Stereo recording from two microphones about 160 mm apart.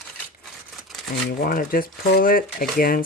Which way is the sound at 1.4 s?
60° left (ahead or behind).